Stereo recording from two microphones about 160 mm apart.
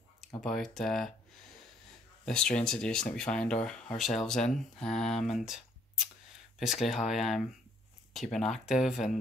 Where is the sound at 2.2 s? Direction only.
5° left (ahead or behind).